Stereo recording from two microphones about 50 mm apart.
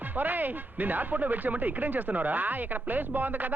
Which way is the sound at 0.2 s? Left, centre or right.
Right.